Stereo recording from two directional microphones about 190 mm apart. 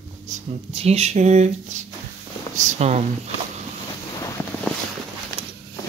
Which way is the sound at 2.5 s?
40° right (ahead or behind).